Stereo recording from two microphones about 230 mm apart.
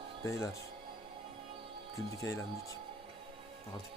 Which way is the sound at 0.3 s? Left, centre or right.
Centre.